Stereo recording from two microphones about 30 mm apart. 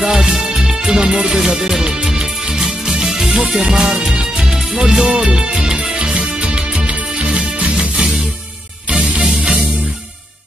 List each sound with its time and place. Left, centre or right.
0.1 s music: right
7.7 s music: right